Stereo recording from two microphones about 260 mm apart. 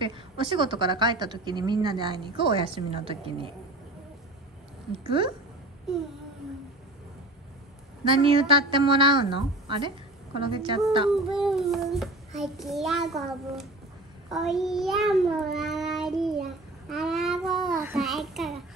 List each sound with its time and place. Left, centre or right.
0.0 s a woman's voice: centre
5.0 s a woman's voice: centre
5.9 s a child's voice: centre
8.0 s a woman's voice: right
11.1 s a child's voice: centre
14.3 s child singing: centre
16.9 s a child's voice: centre